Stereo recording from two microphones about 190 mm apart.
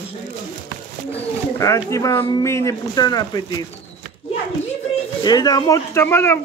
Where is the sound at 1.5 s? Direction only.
15° left (ahead or behind).